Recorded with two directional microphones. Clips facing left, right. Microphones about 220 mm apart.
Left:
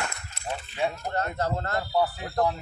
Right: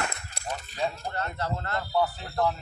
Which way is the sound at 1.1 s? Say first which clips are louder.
Left 4 dB; 45° left (ahead or behind).